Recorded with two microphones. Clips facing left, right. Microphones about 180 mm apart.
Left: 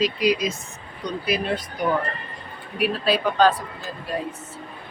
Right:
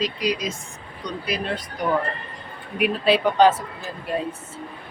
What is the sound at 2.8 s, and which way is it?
Speech, 20° right (ahead or behind).